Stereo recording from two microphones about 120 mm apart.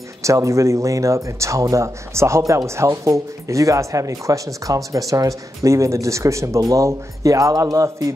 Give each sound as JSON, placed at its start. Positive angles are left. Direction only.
{"t": 0.2, "sound": "speech", "side_deg": -25}